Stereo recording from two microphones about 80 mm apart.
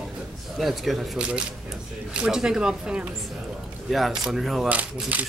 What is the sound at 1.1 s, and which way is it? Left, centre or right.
Speech, centre.